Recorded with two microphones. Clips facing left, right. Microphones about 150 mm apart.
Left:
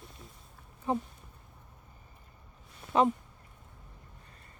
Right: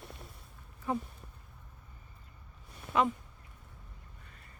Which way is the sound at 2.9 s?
30° left (ahead or behind).